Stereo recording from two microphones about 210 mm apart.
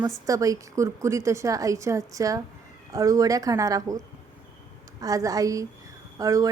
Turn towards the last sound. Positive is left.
turn(degrees=-15)  # may be behind; listen again after turning